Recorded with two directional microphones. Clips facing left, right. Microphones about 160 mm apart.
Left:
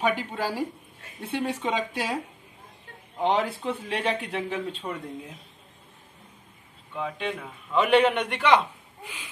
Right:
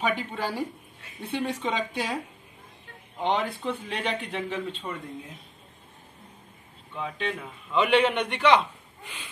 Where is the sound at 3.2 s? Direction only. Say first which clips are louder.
Left 2 dB; 10° left (ahead or behind).